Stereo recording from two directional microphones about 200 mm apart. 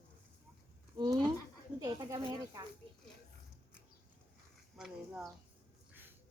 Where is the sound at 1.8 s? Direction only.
15° right (ahead or behind).